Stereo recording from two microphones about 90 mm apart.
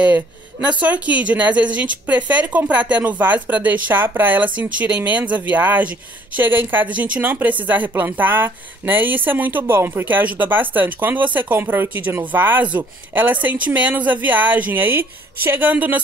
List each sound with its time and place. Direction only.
0.7 s a woman's voice: 15° right (ahead or behind)